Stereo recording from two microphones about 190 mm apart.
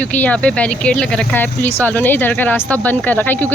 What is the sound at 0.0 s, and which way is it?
Speech, 10° left (ahead or behind).